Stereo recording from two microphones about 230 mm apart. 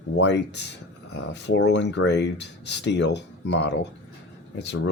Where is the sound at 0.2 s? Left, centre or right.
Left.